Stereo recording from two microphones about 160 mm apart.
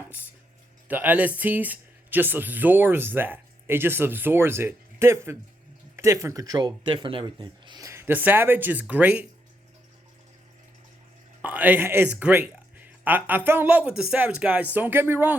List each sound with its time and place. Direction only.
0.1 s speech: 10° right (ahead or behind)
11.4 s speech: 10° right (ahead or behind)